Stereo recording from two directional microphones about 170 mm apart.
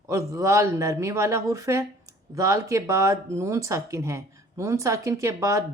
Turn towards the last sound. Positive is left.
turn(degrees=-20)  # may be behind; listen again after turning